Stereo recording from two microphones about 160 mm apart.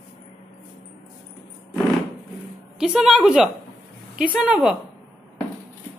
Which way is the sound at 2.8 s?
5° right (ahead or behind).